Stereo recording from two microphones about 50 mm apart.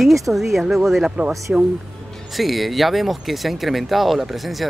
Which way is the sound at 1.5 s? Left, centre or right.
Centre.